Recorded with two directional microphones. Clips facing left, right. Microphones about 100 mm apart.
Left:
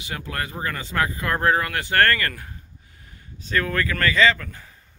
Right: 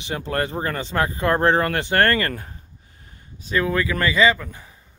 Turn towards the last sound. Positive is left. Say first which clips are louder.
# right 1 dB
turn(degrees=-15)  # may be behind; listen again after turning